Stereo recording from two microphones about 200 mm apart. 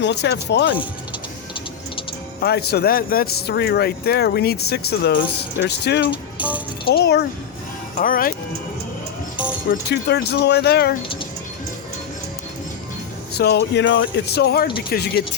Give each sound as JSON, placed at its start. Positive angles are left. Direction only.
{"t": 0.0, "sound": "speech", "side_deg": 60}
{"t": 2.4, "sound": "speech", "side_deg": 50}
{"t": 7.9, "sound": "speech", "side_deg": 45}
{"t": 9.9, "sound": "speech", "side_deg": 55}
{"t": 13.3, "sound": "speech", "side_deg": 55}